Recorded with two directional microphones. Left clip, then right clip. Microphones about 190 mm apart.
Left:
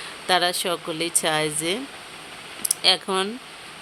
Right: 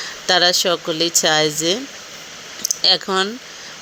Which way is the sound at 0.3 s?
15° right (ahead or behind).